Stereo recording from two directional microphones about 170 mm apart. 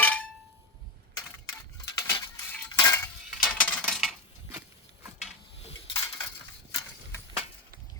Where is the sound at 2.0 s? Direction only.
20° left (ahead or behind).